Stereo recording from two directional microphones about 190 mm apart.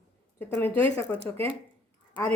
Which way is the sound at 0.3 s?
10° left (ahead or behind).